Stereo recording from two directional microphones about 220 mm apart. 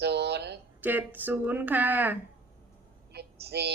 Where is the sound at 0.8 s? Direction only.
10° right (ahead or behind).